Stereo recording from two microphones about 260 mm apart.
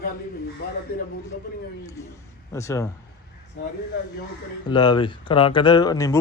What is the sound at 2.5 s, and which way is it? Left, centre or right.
Speech, centre.